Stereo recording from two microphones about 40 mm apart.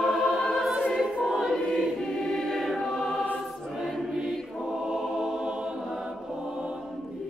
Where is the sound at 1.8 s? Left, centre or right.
Centre.